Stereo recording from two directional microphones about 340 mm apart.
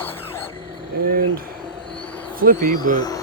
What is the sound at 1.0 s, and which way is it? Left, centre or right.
Speech, right.